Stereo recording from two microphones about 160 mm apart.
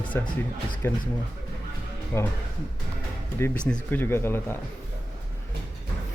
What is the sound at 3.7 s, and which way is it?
Speech, 10° left (ahead or behind).